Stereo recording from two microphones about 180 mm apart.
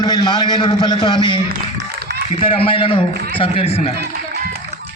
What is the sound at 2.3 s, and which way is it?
A man's voice, 30° left (ahead or behind).